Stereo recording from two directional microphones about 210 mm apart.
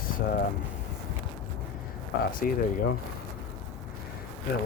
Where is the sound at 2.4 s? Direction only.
40° left (ahead or behind).